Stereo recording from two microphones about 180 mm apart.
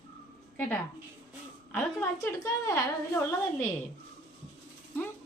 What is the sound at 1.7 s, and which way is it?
A woman's voice, 15° left (ahead or behind).